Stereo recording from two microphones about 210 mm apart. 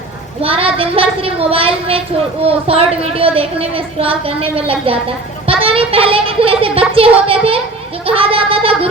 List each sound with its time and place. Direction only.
0.4 s a child's voice: 25° right (ahead or behind)